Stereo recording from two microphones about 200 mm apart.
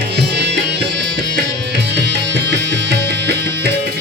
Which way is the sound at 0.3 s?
60° right (ahead or behind).